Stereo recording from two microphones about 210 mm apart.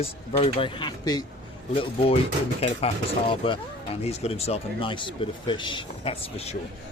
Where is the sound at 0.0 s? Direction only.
30° left (ahead or behind).